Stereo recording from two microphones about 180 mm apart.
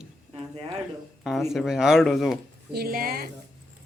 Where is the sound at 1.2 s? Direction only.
Centre (ahead or behind).